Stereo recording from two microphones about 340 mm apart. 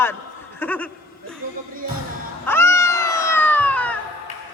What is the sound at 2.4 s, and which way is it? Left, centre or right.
Cat, centre.